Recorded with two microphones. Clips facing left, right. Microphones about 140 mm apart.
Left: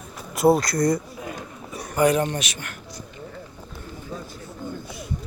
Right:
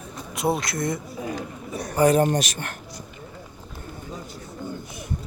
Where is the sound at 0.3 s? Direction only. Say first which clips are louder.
Left 7 dB; centre (ahead or behind).